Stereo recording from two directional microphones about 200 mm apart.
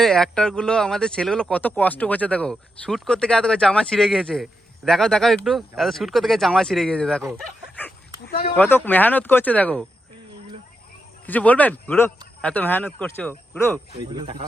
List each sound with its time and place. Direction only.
0.0 s speech: centre (ahead or behind)
11.3 s speech: 5° left (ahead or behind)
14.2 s speech: 25° right (ahead or behind)